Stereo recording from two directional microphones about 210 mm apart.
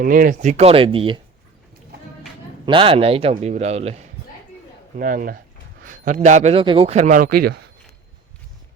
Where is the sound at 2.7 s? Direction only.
25° right (ahead or behind).